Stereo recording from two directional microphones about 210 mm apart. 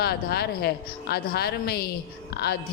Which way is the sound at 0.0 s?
50° left (ahead or behind).